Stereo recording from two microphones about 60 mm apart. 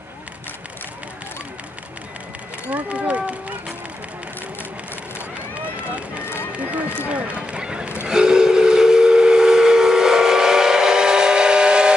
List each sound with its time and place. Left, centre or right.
2.7 s run: right
5.8 s run: right
8.0 s steam whistle: centre